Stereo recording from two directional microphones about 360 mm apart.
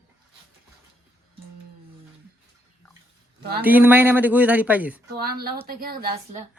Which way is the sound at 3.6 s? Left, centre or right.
Centre.